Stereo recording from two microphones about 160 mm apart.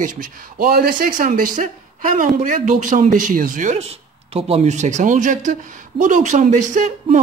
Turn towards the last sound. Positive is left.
turn(degrees=-50)  # may be behind; listen again after turning